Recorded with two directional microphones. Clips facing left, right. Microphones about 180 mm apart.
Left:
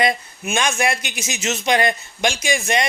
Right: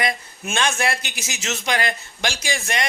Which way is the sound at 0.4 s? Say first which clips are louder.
Left 2 dB; 15° left (ahead or behind).